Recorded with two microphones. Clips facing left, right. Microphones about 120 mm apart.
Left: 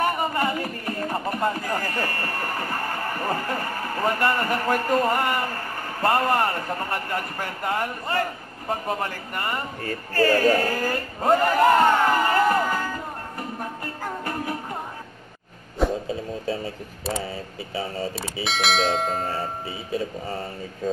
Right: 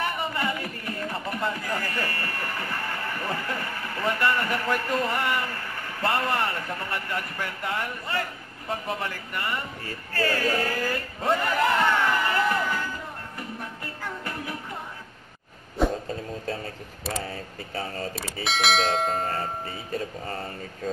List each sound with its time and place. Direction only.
0.0 s speech: 45° left (ahead or behind)
10.1 s a sound: 45° left (ahead or behind)
15.8 s speech: 5° left (ahead or behind)